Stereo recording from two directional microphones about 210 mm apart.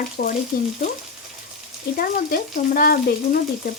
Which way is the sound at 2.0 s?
45° left (ahead or behind).